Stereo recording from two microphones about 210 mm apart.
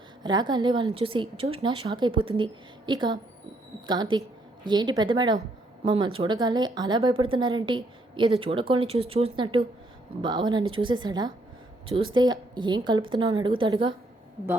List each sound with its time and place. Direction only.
0.2 s a woman's voice: 20° right (ahead or behind)